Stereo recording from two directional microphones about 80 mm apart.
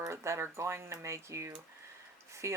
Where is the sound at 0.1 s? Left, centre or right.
Right.